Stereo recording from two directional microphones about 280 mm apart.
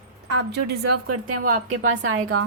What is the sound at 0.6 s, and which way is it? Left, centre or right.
Speech, right.